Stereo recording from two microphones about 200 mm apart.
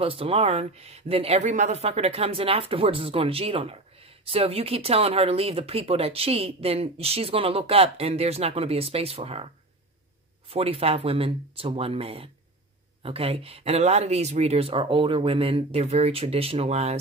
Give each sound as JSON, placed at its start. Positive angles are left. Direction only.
{"t": 0.0, "sound": "speech", "side_deg": -30}
{"t": 10.5, "sound": "speech", "side_deg": -30}